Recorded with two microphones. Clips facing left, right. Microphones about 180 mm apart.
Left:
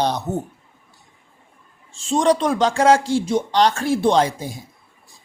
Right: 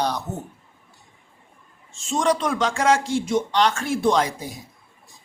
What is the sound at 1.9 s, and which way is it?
Speech, 35° left (ahead or behind).